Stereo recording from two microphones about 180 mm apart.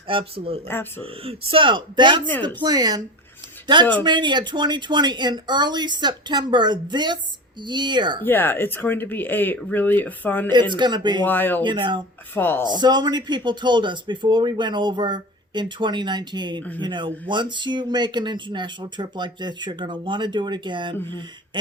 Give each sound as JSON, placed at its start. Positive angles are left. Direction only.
{"t": 0.1, "sound": "speech", "side_deg": -30}
{"t": 0.7, "sound": "speech", "side_deg": 10}
{"t": 1.0, "sound": "speech", "side_deg": -30}
{"t": 8.2, "sound": "speech", "side_deg": 10}
{"t": 10.5, "sound": "speech", "side_deg": -25}
{"t": 11.2, "sound": "speech", "side_deg": 10}
{"t": 11.6, "sound": "speech", "side_deg": -25}
{"t": 12.3, "sound": "speech", "side_deg": 10}
{"t": 12.6, "sound": "speech", "side_deg": -25}